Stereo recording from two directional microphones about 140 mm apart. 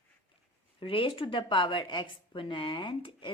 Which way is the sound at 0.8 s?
40° left (ahead or behind).